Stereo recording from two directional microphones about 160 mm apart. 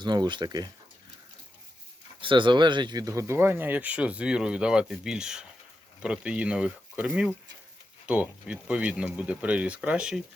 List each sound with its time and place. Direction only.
0.0 s speech: 25° right (ahead or behind)
2.2 s speech: 30° right (ahead or behind); by 10.2 s 5° right (ahead or behind)